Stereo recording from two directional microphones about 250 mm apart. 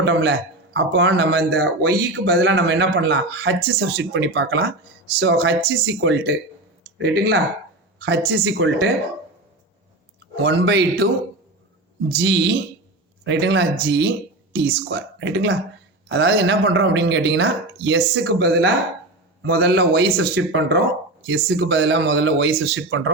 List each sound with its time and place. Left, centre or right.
0.0 s a sound: right
0.9 s speech: right
10.3 s speech: right